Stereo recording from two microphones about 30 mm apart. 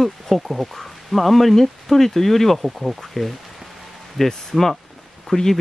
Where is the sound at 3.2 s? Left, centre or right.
Centre.